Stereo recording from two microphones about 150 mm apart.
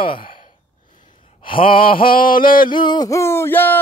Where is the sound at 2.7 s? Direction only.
30° left (ahead or behind); by 3.8 s 15° left (ahead or behind).